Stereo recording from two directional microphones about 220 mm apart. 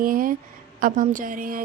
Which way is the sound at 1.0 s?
35° right (ahead or behind).